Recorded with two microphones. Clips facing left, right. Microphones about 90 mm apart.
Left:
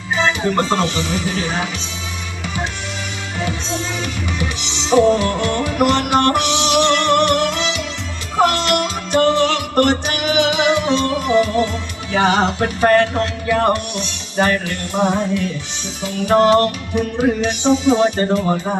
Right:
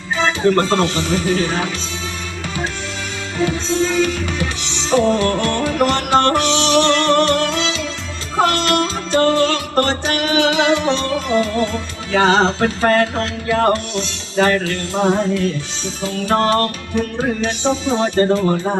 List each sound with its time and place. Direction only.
0.4 s music: 15° left (ahead or behind)
3.4 s music: 20° left (ahead or behind)